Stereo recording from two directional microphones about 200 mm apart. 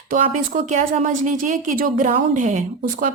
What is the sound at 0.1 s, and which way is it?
Speech, 40° right (ahead or behind).